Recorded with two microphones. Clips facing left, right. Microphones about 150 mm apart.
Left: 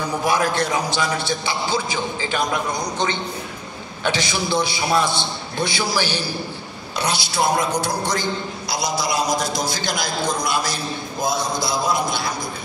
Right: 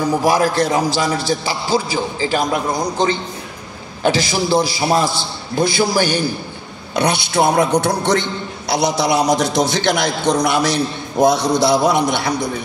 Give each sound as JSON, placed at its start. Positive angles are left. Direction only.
{"t": 0.2, "sound": "a man's voice", "side_deg": -40}
{"t": 4.0, "sound": "a man's voice", "side_deg": -40}
{"t": 7.0, "sound": "a man's voice", "side_deg": -60}